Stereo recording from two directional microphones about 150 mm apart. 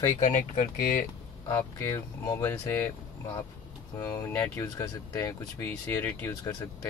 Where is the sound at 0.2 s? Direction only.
60° left (ahead or behind).